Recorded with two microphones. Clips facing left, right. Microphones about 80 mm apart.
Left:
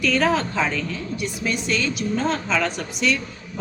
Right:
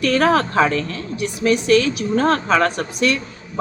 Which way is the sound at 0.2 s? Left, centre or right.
Right.